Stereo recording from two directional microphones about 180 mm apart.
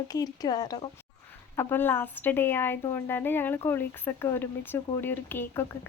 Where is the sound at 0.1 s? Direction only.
20° left (ahead or behind).